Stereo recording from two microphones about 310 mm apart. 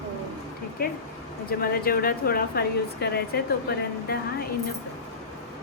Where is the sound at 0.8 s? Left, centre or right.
Left.